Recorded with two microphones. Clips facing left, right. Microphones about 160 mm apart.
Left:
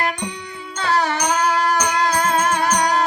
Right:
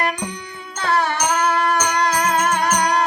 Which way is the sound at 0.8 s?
60° right (ahead or behind).